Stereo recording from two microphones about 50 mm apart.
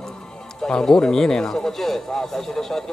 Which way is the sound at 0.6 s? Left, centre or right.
Centre.